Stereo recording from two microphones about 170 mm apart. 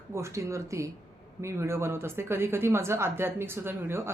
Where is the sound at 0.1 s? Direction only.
15° right (ahead or behind).